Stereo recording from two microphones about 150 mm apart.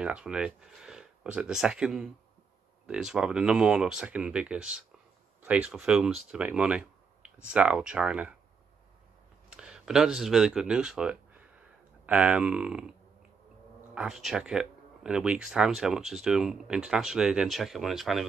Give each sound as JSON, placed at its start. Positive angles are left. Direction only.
{"t": 0.0, "sound": "speech", "side_deg": -5}
{"t": 9.5, "sound": "speech", "side_deg": -5}
{"t": 13.9, "sound": "speech", "side_deg": -5}